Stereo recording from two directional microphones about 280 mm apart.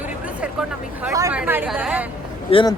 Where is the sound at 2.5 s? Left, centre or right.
Centre.